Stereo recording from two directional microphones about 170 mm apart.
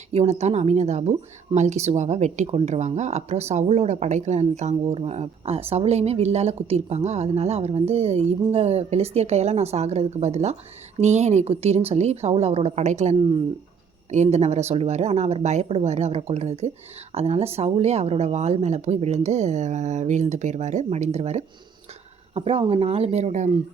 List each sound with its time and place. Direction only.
0.1 s a woman's voice: 40° right (ahead or behind)